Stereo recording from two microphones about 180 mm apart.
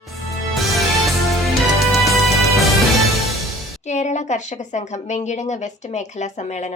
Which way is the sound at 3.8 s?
40° left (ahead or behind).